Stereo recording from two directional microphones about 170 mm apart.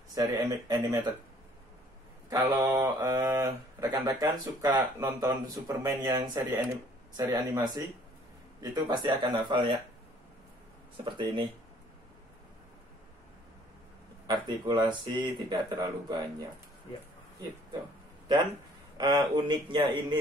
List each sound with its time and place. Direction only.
0.1 s speech: 20° right (ahead or behind)
2.2 s speech: 20° right (ahead or behind)
11.1 s speech: 30° right (ahead or behind)
14.2 s speech: 25° right (ahead or behind)
18.9 s speech: 25° right (ahead or behind)